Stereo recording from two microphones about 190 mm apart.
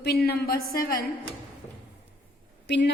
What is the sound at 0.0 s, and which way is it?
Speech, 55° left (ahead or behind).